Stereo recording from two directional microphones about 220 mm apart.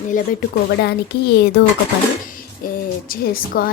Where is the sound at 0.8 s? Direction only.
50° left (ahead or behind).